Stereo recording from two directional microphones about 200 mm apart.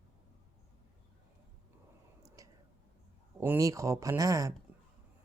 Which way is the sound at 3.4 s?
15° right (ahead or behind).